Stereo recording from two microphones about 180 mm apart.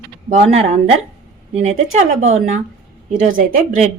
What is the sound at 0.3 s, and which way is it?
A woman's voice, 35° right (ahead or behind).